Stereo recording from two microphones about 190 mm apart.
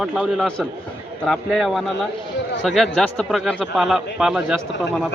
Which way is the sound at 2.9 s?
Centre (ahead or behind).